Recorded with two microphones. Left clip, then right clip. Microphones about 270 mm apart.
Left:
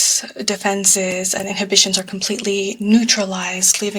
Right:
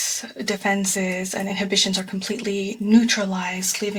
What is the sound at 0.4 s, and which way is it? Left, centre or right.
Speech, left.